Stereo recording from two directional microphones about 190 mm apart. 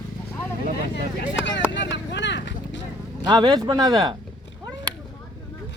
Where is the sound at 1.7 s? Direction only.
70° left (ahead or behind).